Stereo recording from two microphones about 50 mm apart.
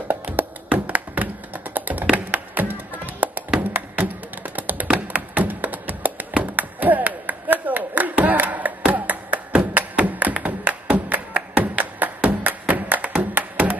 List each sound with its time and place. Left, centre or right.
0.1 s tap: right
2.1 s music: right
3.9 s tap: right
4.8 s music: right